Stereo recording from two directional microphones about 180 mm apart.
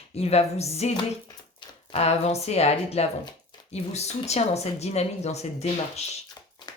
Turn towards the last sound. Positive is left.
turn(degrees=35)  # may be behind; listen again after turning